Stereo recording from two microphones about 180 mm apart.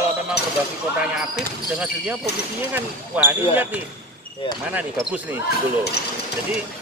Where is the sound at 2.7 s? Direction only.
10° right (ahead or behind).